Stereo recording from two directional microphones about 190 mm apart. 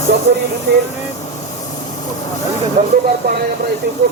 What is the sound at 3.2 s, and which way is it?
Speech, 60° right (ahead or behind).